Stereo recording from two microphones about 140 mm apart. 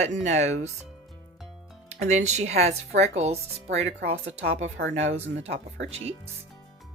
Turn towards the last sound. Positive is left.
turn(degrees=-50)  # may be behind; listen again after turning